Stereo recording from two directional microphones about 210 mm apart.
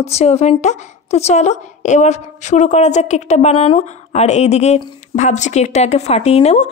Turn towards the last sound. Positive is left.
turn(degrees=30)  # may be behind; listen again after turning